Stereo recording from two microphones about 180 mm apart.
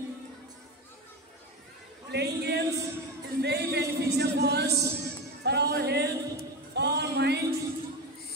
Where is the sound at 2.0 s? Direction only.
70° right (ahead or behind).